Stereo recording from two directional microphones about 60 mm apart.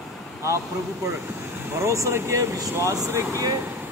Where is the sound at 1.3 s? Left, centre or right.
Right.